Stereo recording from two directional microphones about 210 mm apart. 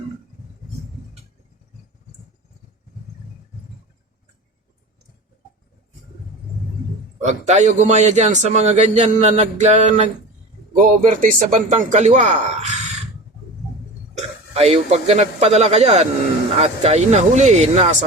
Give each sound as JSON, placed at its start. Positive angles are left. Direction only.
{"t": 7.2, "sound": "a man's voice", "side_deg": -30}
{"t": 14.2, "sound": "a man's voice", "side_deg": -30}